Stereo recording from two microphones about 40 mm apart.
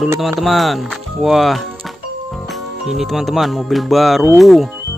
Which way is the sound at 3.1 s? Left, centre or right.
Centre.